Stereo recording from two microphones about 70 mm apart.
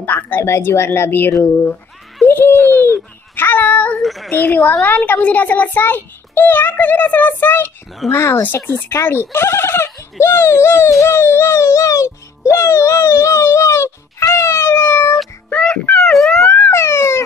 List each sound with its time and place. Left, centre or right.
0.0 s a woman's voice: left
2.2 s pigeon: left
4.0 s a sound: centre
4.3 s a child's voice: left
11.1 s music: left
15.5 s wail: centre
16.1 s wail: centre
16.4 s a sound: centre
16.7 s a sound: left